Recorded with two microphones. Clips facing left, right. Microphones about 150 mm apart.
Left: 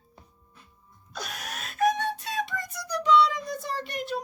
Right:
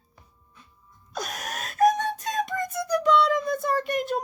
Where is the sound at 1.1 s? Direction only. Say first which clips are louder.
Right 4 dB; 45° right (ahead or behind).